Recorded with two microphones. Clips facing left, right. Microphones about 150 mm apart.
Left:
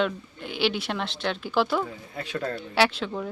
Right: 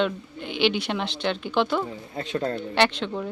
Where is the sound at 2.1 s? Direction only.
25° right (ahead or behind).